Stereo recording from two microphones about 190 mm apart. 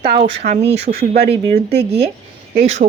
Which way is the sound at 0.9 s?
60° right (ahead or behind).